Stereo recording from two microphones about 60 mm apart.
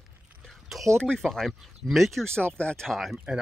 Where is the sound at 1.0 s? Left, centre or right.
Centre.